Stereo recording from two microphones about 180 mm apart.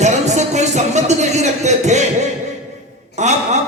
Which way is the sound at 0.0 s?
40° right (ahead or behind).